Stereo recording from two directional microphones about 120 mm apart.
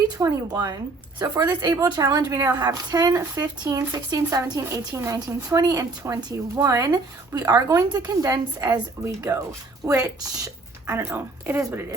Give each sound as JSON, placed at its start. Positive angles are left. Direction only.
{"t": 0.2, "sound": "a woman's voice", "side_deg": -30}